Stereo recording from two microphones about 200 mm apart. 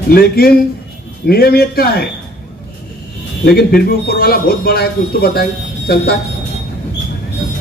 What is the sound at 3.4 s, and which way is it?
A man's voice, 50° left (ahead or behind).